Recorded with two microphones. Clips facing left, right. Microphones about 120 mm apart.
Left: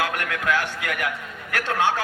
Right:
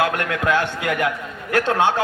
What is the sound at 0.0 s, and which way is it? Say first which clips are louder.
A man's voice: right 5 dB; 30° right (ahead or behind).